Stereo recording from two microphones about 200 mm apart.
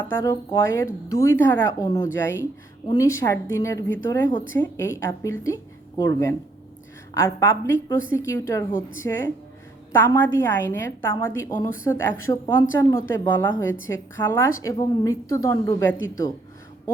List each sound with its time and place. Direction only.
0.0 s a woman's voice: 15° left (ahead or behind)